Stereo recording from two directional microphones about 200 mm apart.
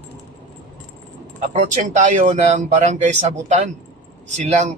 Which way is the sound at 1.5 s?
35° right (ahead or behind).